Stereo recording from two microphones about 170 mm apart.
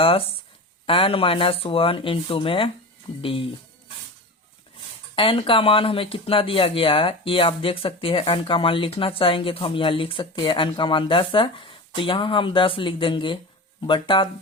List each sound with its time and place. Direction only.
0.0 s speech: 35° left (ahead or behind)
5.1 s speech: 30° left (ahead or behind)